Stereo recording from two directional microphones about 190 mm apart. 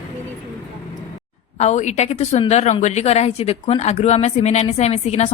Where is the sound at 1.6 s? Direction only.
35° left (ahead or behind).